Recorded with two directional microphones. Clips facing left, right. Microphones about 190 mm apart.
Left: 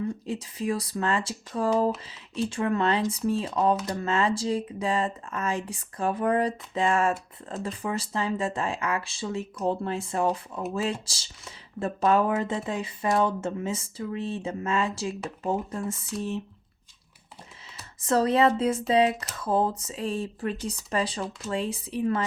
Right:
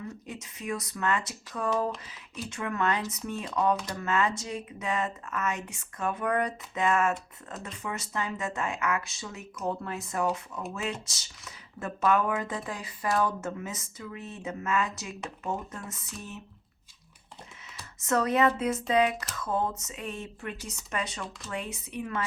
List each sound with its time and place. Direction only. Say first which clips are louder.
0.3 s speech: left 3 dB; 30° left (ahead or behind)
18.0 s speech: left 3 dB; 30° left (ahead or behind)